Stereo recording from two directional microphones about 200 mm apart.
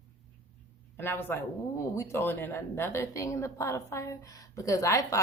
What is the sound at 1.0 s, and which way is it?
A woman's voice, 10° left (ahead or behind).